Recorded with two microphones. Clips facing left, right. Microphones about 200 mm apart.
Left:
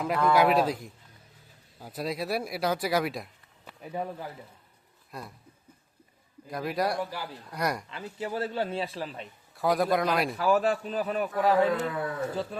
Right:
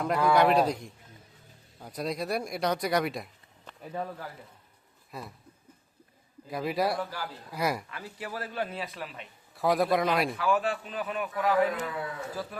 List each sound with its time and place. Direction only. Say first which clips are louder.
0.0 s speech: even; centre (ahead or behind)
5.1 s speech: even; centre (ahead or behind)
6.5 s speech: even; centre (ahead or behind)
7.0 s a man's voice: left 1 dB; 15° left (ahead or behind)
7.5 s speech: right 1 dB; 5° right (ahead or behind)
7.9 s a man's voice: left 5 dB; 25° left (ahead or behind)
9.6 s speech: even; centre (ahead or behind)
10.3 s a man's voice: left 3 dB; 40° left (ahead or behind)